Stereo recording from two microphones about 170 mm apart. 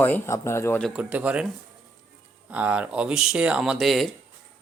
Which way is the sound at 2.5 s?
10° right (ahead or behind).